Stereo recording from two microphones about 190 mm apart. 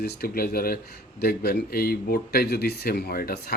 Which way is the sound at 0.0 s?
55° left (ahead or behind).